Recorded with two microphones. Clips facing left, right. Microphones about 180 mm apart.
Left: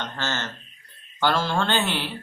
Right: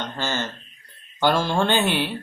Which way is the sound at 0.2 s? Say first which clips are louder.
Right 5 dB; 10° right (ahead or behind).